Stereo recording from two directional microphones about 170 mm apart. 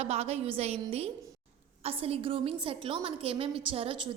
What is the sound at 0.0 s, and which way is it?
A woman's voice, 35° right (ahead or behind).